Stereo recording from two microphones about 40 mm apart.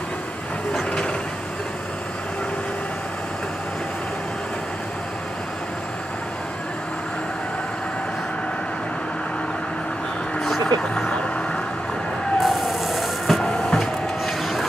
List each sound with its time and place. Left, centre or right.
10.4 s vehicle: centre
12.4 s a sound: centre
13.4 s printer: centre